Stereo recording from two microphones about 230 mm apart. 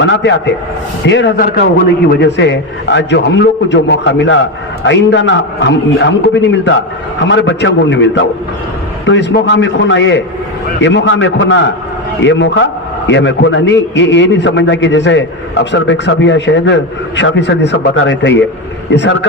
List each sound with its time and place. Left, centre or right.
0.0 s a man's voice: left